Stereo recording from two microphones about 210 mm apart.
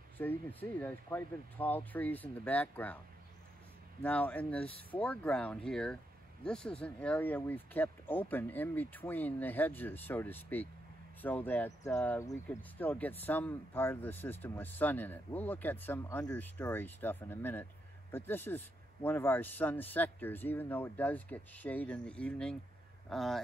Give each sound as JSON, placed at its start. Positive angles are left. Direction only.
{"t": 0.2, "sound": "speech", "side_deg": 10}
{"t": 4.0, "sound": "speech", "side_deg": 5}